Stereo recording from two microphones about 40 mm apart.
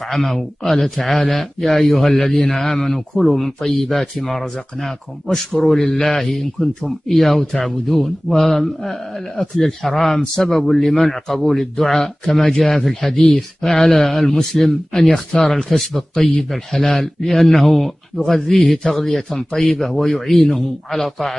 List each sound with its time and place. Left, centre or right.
0.1 s a man's voice: centre
5.6 s a man's voice: centre
6.6 s speech: left
7.1 s a man's voice: centre